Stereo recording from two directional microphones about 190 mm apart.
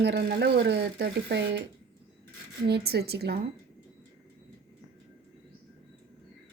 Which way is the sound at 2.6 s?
60° right (ahead or behind).